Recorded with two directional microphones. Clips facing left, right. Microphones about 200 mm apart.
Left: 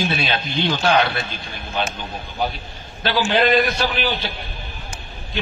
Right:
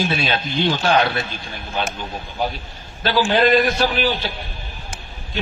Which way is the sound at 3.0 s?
45° right (ahead or behind).